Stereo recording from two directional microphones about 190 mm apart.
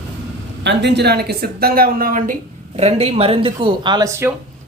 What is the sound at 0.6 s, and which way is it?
Speech, 65° right (ahead or behind).